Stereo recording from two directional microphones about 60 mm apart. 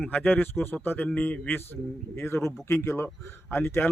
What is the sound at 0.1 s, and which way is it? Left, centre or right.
A man's voice, left.